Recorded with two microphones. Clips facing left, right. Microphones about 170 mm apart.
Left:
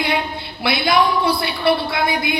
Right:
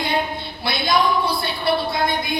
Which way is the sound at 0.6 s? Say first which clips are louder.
Left 3 dB; 70° left (ahead or behind).